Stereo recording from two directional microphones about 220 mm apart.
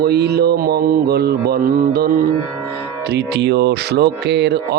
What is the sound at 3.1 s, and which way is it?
Speech, 50° right (ahead or behind).